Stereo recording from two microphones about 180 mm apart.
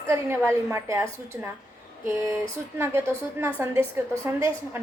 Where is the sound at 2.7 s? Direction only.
15° right (ahead or behind).